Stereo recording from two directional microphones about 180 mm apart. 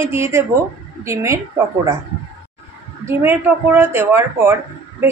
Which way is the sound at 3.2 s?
10° right (ahead or behind).